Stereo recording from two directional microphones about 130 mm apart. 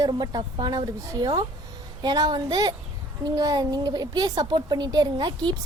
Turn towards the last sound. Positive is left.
turn(degrees=-30)  # may be behind; listen again after turning